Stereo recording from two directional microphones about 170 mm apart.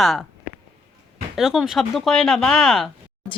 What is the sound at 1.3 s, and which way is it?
Speech, 5° right (ahead or behind).